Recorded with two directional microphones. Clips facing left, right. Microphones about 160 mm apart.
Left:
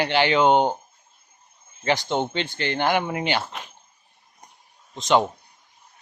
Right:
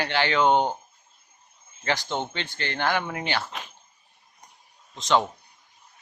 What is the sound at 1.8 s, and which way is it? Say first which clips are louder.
Speech: left 5 dB; 20° left (ahead or behind).